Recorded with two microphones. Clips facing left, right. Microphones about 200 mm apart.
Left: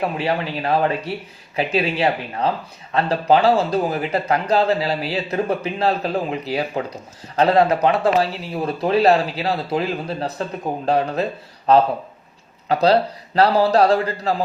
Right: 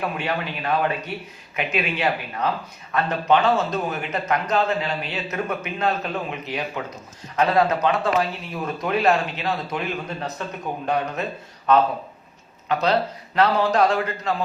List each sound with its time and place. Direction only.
0.0 s speech: 30° left (ahead or behind)